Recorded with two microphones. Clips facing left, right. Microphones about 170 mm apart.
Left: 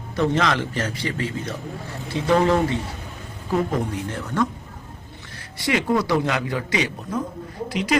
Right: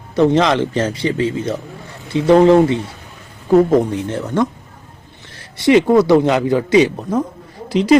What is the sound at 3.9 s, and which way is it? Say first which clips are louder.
Speech: right 7 dB; 25° right (ahead or behind).